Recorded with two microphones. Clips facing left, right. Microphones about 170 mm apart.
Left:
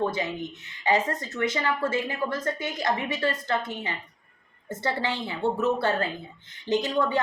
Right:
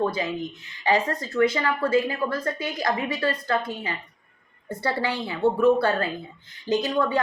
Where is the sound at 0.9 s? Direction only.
20° left (ahead or behind).